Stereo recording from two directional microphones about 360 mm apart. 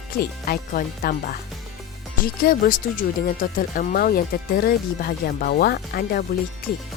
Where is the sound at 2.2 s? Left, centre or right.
Left.